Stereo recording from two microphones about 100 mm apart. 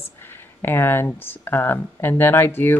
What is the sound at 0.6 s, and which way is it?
Speech, 25° left (ahead or behind).